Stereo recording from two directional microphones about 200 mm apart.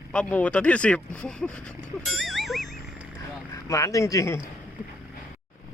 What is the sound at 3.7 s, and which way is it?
Speech, 15° left (ahead or behind).